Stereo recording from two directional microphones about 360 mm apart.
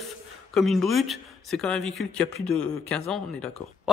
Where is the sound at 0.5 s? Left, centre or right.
Centre.